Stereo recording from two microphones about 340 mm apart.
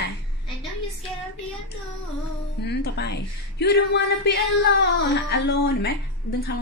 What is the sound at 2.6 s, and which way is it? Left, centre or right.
Speech, left.